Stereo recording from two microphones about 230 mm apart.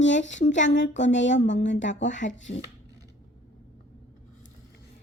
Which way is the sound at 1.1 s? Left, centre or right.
Left.